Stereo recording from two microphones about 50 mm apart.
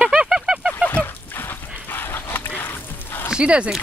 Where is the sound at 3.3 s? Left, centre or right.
Right.